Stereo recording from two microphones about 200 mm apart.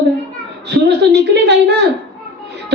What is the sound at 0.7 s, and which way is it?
Speech, 60° right (ahead or behind).